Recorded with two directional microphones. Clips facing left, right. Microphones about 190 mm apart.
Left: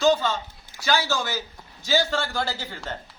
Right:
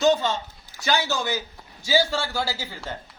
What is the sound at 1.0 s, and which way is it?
A man's voice, 15° right (ahead or behind).